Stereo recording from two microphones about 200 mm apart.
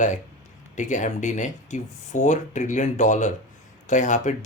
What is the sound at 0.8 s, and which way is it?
Speech, 40° left (ahead or behind).